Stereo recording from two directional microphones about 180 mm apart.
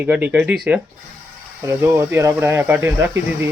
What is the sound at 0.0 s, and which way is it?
Speech, 10° right (ahead or behind).